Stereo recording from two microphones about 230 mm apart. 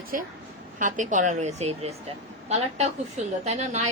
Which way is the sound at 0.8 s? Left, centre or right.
Right.